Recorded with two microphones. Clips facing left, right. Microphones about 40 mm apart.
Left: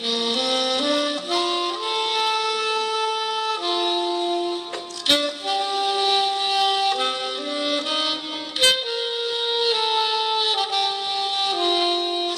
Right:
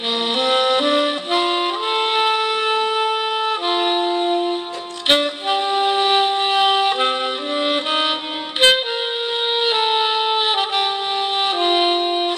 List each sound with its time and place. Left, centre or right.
0.4 s music: right
5.0 s wind instrument: right
7.6 s music: right
9.6 s saxophone: right
11.4 s music: right